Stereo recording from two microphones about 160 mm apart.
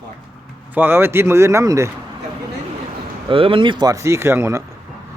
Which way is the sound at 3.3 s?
35° right (ahead or behind).